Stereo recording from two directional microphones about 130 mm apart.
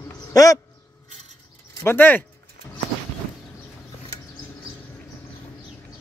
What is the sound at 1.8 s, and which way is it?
Speech, 15° left (ahead or behind).